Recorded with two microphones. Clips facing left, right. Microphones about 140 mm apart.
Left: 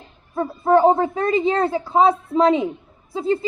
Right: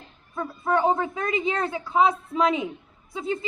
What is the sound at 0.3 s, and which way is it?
A woman's voice, 30° left (ahead or behind).